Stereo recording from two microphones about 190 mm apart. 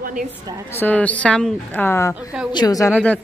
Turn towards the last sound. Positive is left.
turn(degrees=15)  # may be behind; listen again after turning